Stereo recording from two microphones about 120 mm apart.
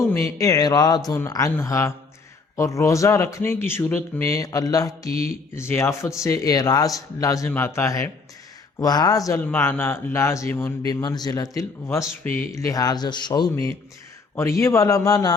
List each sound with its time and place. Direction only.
0.0 s speech: 20° left (ahead or behind)
9.4 s speech: 15° left (ahead or behind)
10.8 s speech: 35° left (ahead or behind)